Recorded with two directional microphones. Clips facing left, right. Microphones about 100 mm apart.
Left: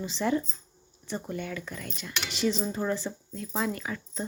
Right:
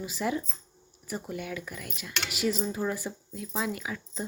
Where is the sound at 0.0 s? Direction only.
5° right (ahead or behind).